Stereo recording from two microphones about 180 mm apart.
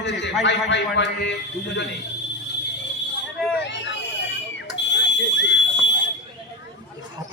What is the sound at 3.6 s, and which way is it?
Hubbub, 80° left.